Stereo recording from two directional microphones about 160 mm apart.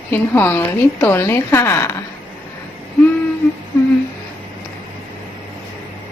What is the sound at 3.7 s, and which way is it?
Humming, 15° left (ahead or behind).